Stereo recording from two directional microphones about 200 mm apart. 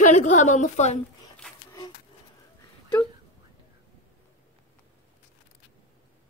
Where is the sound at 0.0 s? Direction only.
35° left (ahead or behind).